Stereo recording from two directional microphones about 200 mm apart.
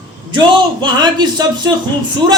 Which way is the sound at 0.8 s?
20° right (ahead or behind).